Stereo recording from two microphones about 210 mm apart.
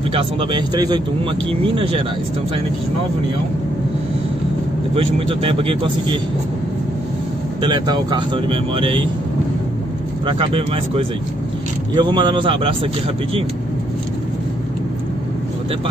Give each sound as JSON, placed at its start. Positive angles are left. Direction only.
{"t": 0.1, "sound": "speech", "side_deg": -25}
{"t": 4.9, "sound": "speech", "side_deg": -25}
{"t": 7.6, "sound": "speech", "side_deg": -20}
{"t": 10.2, "sound": "speech", "side_deg": -25}